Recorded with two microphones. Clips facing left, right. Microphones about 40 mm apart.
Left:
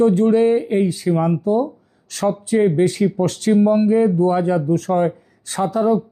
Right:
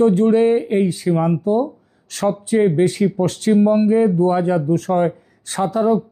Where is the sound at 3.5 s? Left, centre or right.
Centre.